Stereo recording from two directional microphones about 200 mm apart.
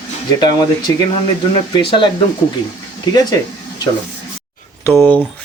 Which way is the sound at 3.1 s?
20° left (ahead or behind).